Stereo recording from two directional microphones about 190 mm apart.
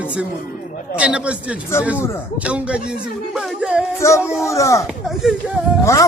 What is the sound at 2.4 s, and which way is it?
Speech, 5° right (ahead or behind).